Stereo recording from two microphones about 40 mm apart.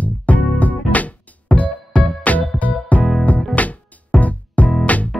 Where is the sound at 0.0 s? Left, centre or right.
Left.